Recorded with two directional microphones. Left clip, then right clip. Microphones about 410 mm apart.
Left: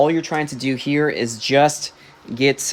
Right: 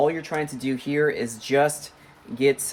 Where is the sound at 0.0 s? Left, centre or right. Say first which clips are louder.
Left 5 dB; centre.